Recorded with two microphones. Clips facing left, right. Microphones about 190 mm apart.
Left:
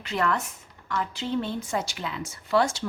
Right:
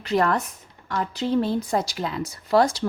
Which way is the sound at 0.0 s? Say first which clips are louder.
Right 5 dB; 35° right (ahead or behind).